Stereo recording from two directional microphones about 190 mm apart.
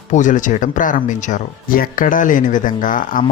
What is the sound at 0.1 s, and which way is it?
Speech, 40° left (ahead or behind).